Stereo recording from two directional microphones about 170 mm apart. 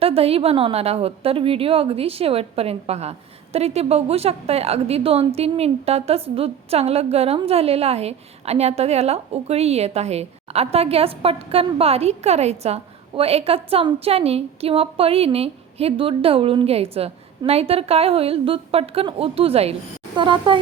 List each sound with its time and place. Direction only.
0.0 s a woman's voice: 35° right (ahead or behind)